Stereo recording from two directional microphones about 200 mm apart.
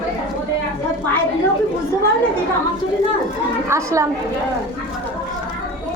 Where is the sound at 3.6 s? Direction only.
15° right (ahead or behind).